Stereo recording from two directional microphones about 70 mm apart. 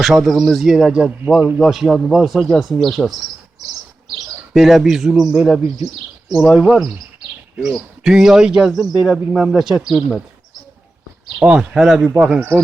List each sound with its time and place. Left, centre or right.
0.0 s a man's voice: centre
4.5 s a man's voice: centre
7.6 s a man's voice: centre
11.4 s speech: centre
11.7 s a man's voice: centre
12.4 s speech: right